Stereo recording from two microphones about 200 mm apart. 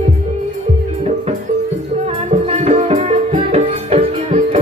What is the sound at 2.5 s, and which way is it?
Music, 35° right (ahead or behind).